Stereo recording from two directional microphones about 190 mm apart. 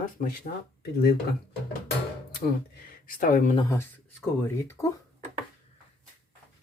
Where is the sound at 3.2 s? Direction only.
45° left (ahead or behind).